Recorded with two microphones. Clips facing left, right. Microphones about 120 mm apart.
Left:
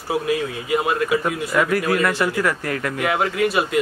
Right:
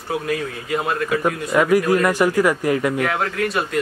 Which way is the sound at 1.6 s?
15° right (ahead or behind).